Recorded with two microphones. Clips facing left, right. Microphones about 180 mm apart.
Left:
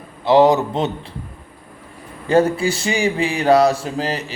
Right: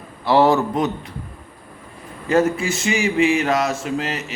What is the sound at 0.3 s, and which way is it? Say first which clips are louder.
Speech: left 3 dB; 20° left (ahead or behind).